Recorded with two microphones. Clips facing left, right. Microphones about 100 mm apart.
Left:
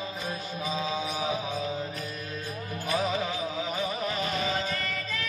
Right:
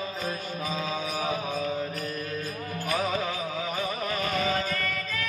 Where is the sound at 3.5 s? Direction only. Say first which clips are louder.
Even; 50° right (ahead or behind).